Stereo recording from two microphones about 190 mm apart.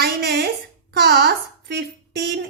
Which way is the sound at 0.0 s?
60° right (ahead or behind).